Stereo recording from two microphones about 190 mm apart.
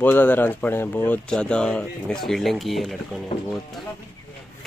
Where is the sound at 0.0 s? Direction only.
10° left (ahead or behind).